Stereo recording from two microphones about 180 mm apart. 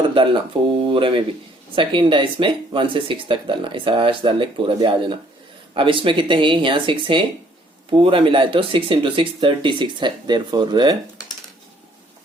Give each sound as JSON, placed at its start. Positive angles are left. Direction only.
{"t": 0.1, "sound": "speech", "side_deg": -30}